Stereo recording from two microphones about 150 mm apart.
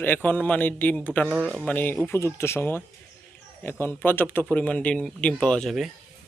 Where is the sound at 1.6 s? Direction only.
10° left (ahead or behind).